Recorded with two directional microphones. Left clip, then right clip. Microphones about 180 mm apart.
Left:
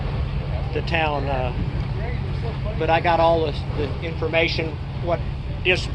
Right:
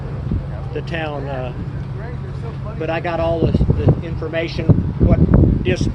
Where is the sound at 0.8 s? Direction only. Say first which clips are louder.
Left 2 dB; 50° right (ahead or behind).